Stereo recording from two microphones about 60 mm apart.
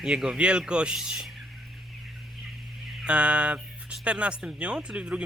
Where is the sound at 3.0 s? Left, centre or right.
Centre.